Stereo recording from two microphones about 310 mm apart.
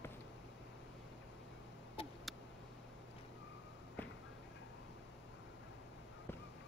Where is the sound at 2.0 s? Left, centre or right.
Centre.